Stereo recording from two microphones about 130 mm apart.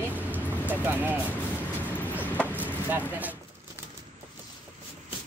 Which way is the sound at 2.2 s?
15° left (ahead or behind).